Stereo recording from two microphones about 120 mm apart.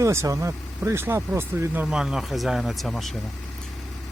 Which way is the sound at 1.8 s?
5° right (ahead or behind).